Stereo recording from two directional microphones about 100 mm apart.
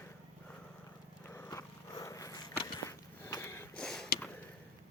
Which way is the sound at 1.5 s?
35° left (ahead or behind).